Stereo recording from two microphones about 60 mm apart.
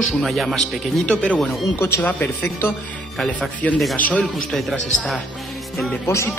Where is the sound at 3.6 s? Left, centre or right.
Left.